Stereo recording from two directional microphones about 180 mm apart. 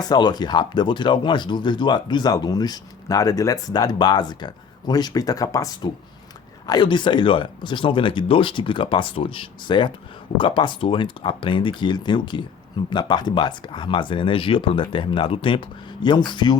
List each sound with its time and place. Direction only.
0.0 s speech: 25° left (ahead or behind)